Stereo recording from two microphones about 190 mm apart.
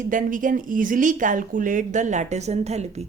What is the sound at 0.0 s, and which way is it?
Speech, 45° right (ahead or behind).